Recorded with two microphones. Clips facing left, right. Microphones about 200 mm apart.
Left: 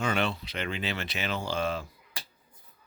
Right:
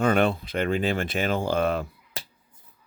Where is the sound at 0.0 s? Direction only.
55° right (ahead or behind).